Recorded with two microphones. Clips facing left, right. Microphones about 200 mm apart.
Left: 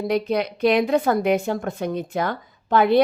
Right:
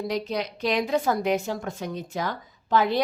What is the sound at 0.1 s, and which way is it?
A woman's voice, 55° left (ahead or behind).